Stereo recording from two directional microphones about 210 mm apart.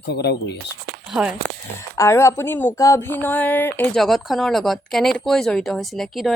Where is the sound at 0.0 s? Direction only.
50° left (ahead or behind).